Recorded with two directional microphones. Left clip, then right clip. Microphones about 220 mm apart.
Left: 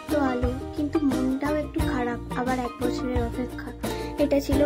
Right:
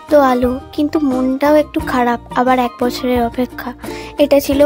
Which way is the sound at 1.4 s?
45° right (ahead or behind).